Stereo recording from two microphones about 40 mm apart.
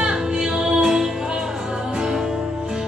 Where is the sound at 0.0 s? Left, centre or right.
Centre.